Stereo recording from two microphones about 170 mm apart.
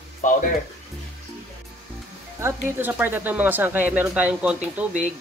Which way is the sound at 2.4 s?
10° right (ahead or behind).